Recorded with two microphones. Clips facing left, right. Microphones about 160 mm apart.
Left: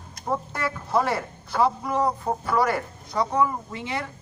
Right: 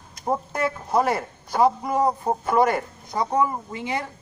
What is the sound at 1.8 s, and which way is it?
Speech, 25° right (ahead or behind).